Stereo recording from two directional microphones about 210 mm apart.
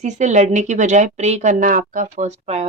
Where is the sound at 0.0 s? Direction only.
35° right (ahead or behind).